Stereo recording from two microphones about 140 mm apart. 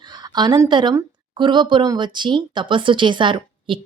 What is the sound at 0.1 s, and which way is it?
A woman's voice, 30° right (ahead or behind).